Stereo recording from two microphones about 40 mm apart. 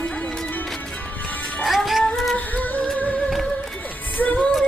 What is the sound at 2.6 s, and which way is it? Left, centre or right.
Music, left.